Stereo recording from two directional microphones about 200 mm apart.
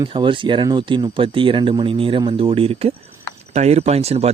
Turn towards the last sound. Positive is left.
turn(degrees=-30)  # may be behind; listen again after turning